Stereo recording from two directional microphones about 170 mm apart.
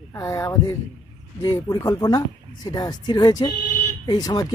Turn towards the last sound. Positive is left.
turn(degrees=20)  # may be behind; listen again after turning